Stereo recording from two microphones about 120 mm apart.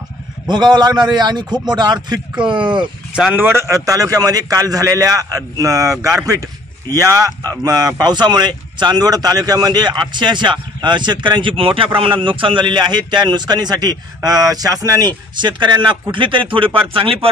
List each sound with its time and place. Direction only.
0.5 s speech: 35° right (ahead or behind)
3.3 s a man's voice: 20° right (ahead or behind); by 17.3 s 50° right (ahead or behind)